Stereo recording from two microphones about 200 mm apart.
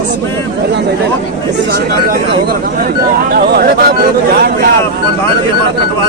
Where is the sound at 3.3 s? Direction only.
50° right (ahead or behind).